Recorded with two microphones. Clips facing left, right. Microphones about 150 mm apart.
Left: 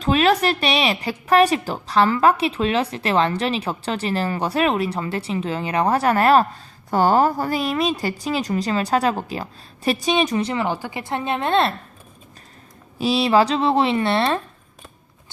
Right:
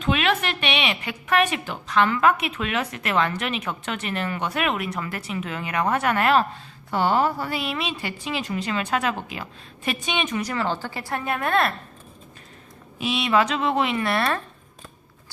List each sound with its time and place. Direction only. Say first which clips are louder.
0.0 s a woman's voice: left 6 dB; 35° left (ahead or behind)
13.0 s a woman's voice: left 5 dB; 35° left (ahead or behind)